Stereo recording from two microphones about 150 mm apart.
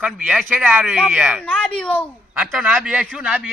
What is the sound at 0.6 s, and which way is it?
Speech, 10° right (ahead or behind).